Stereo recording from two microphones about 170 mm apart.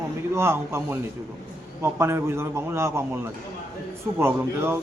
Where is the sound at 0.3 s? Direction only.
15° right (ahead or behind).